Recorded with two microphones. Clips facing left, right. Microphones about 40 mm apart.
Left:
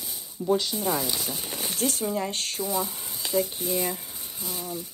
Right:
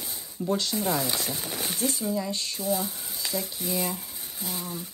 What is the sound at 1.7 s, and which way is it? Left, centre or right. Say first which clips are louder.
Speech: left 2 dB; left.